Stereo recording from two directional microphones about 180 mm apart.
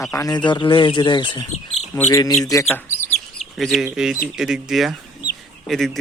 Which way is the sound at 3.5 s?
Centre (ahead or behind).